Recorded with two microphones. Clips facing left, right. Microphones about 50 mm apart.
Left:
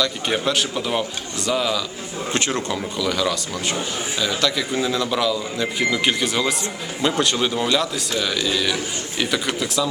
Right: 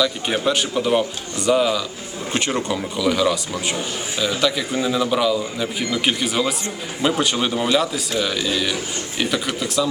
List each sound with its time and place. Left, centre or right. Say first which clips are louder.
0.4 s a man's voice: right 2 dB; centre